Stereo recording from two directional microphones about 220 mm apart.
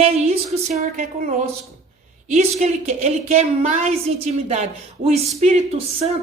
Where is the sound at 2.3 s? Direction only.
30° right (ahead or behind).